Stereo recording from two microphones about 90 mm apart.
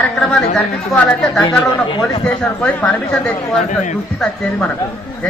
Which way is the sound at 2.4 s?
15° left (ahead or behind).